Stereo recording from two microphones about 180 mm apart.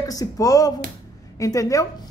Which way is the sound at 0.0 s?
20° left (ahead or behind).